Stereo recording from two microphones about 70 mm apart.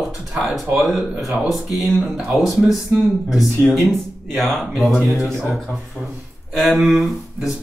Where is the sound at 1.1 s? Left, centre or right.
Centre.